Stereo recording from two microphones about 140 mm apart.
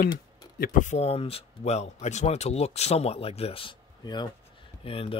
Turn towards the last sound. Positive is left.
turn(degrees=40)  # may be behind; listen again after turning